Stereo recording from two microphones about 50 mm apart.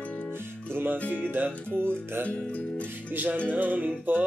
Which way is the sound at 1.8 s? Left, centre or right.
Right.